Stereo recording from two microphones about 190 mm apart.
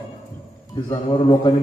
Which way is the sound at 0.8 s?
20° left (ahead or behind).